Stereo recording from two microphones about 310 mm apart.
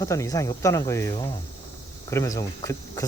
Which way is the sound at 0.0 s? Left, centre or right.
Centre.